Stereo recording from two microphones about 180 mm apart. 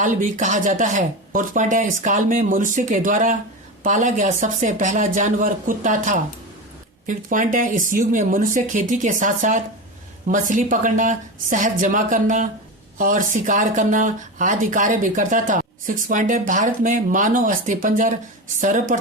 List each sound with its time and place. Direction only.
0.0 s speech: 45° right (ahead or behind)